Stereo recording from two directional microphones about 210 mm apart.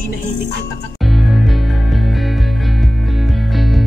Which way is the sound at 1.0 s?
Centre (ahead or behind).